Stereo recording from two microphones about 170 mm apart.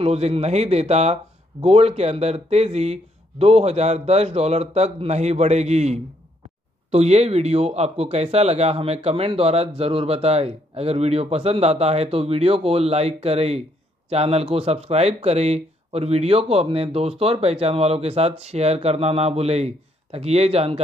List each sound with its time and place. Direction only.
0.0 s speech: 35° right (ahead or behind)